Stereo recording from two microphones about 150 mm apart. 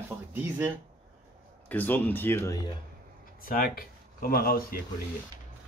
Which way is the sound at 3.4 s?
75° left (ahead or behind).